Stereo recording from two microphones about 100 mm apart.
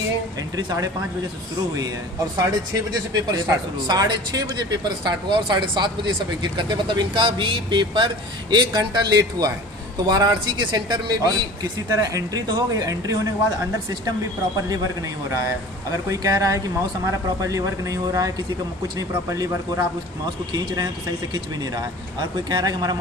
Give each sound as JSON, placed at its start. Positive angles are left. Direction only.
{"t": 0.6, "sound": "speech", "side_deg": -45}
{"t": 2.3, "sound": "speech", "side_deg": -40}
{"t": 15.9, "sound": "speech", "side_deg": -35}
{"t": 20.5, "sound": "speech", "side_deg": -40}
{"t": 22.5, "sound": "speech", "side_deg": -40}